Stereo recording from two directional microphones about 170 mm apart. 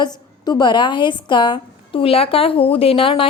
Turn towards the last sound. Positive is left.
turn(degrees=30)  # may be behind; listen again after turning